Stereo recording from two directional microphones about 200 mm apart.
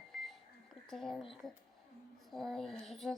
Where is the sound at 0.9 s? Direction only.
Centre (ahead or behind).